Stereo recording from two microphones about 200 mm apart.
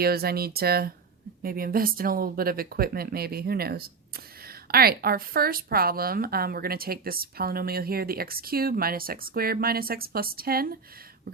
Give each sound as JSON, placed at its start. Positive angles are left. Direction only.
{"t": 0.0, "sound": "speech", "side_deg": -50}